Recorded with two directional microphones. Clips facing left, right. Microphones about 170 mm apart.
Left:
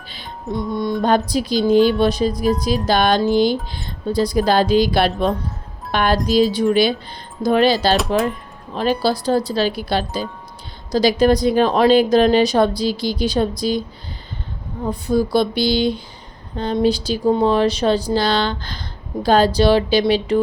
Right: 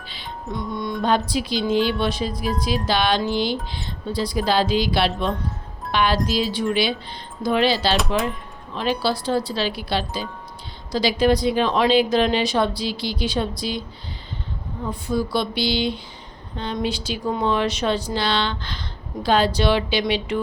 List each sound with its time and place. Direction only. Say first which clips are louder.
0.1 s music: left 5 dB; 40° left (ahead or behind)
1.3 s a woman's voice: left 6 dB; 40° left (ahead or behind)
7.9 s speech: left 4 dB; centre (ahead or behind)
8.7 s a woman's voice: left 4 dB; 40° left (ahead or behind)
14.8 s a woman's voice: left 6 dB; 40° left (ahead or behind)